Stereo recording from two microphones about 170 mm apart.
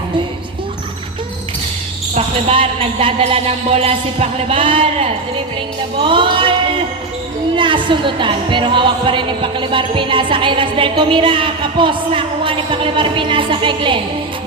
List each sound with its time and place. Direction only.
2.1 s speech: 30° right (ahead or behind)
6.0 s music: 30° right (ahead or behind)
7.5 s music: 30° right (ahead or behind)